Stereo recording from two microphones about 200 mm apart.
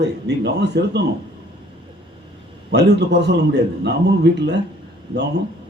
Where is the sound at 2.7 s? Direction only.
55° right (ahead or behind).